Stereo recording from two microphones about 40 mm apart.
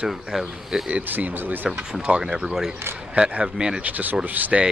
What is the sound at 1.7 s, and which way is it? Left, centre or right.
Speech, right.